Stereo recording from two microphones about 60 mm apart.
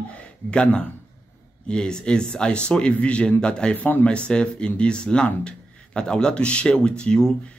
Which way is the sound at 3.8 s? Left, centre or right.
Left.